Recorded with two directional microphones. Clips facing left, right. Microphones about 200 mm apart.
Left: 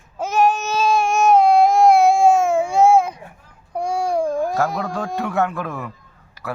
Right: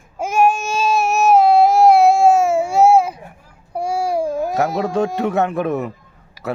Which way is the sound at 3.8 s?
5° right (ahead or behind).